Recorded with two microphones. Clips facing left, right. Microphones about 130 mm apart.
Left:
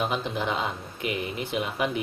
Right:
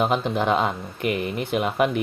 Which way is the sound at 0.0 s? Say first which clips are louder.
Right 6 dB; 60° right (ahead or behind).